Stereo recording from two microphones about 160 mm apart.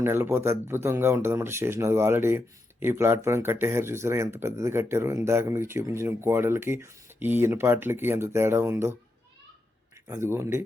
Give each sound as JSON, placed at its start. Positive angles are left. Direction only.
{"t": 0.0, "sound": "speech", "side_deg": -15}
{"t": 10.1, "sound": "speech", "side_deg": -15}